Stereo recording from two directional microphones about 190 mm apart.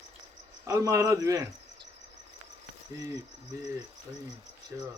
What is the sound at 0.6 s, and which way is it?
Speech, 15° right (ahead or behind).